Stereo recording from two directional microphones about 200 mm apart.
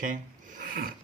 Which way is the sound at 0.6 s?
45° right (ahead or behind).